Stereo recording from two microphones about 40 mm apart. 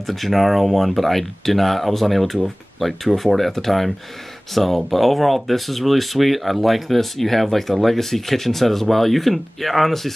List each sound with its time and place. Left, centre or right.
0.0 s speech: centre